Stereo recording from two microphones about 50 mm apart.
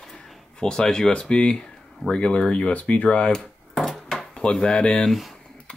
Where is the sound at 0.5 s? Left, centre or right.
Centre.